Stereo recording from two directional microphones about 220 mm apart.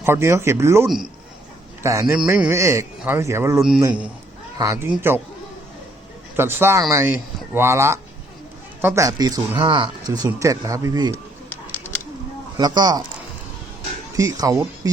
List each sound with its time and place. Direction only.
0.0 s speech: 10° right (ahead or behind)
6.3 s speech: 10° right (ahead or behind)
12.5 s speech: 20° right (ahead or behind)
14.2 s speech: 15° right (ahead or behind)